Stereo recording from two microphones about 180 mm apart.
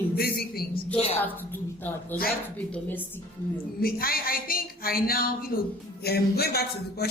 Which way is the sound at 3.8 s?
55° left (ahead or behind).